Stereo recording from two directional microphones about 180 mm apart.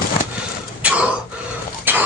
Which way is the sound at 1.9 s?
10° right (ahead or behind).